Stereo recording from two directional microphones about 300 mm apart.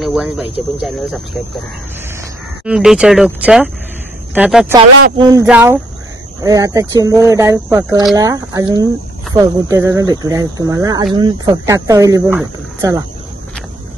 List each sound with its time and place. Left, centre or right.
0.0 s speech: centre
2.6 s speech: centre